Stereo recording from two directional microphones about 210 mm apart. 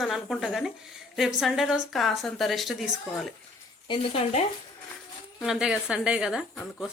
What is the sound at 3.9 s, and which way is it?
Speech, 30° left (ahead or behind).